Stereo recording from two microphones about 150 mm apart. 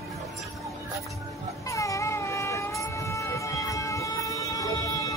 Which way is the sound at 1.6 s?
20° left (ahead or behind).